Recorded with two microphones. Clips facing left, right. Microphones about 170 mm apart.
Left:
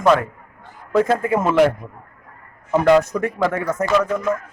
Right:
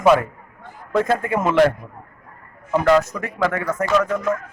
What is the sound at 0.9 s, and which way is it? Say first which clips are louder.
Speech: left 2 dB; 5° left (ahead or behind).